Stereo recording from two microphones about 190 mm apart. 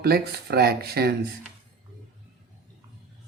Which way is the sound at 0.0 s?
55° right (ahead or behind).